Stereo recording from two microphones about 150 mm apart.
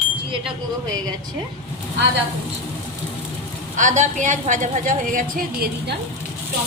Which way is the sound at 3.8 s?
55° right (ahead or behind).